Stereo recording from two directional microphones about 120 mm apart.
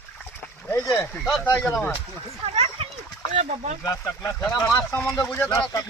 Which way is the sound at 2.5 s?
55° right (ahead or behind).